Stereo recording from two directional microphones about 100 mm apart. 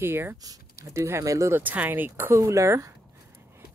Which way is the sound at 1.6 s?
15° right (ahead or behind).